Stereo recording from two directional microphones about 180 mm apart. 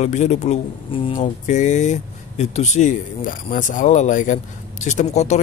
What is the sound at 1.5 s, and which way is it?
Speech, 40° left (ahead or behind).